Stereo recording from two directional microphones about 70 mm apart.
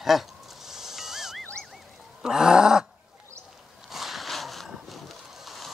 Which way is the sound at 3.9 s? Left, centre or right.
Centre.